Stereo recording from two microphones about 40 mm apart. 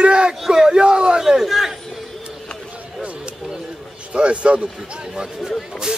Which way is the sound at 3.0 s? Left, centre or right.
Right.